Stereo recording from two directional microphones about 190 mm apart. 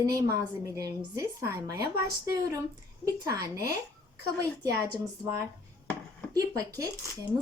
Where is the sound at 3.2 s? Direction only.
15° right (ahead or behind).